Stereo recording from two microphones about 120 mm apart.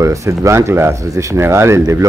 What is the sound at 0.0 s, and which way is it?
Speech, 25° right (ahead or behind).